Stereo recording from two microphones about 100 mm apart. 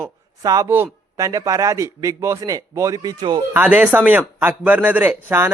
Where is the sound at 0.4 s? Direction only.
40° right (ahead or behind).